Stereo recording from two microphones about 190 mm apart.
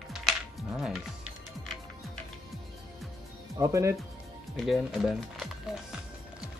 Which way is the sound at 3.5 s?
15° right (ahead or behind).